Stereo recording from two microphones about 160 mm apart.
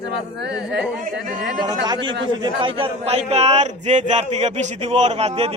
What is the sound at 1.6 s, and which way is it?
A man's voice, 25° right (ahead or behind).